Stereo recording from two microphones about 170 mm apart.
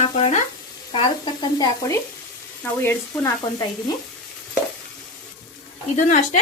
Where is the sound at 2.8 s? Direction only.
15° left (ahead or behind).